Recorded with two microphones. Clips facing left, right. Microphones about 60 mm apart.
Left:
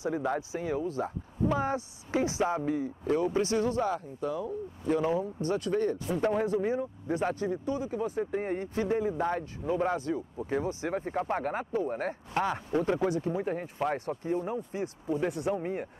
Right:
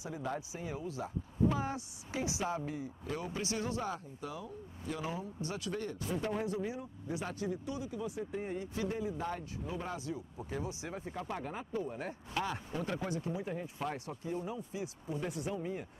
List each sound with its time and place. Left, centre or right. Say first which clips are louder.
0.0 s speech: left 9 dB; left
15.3 s speech: left 7 dB; left